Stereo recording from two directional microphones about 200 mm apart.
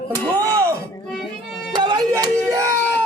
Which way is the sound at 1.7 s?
20° right (ahead or behind).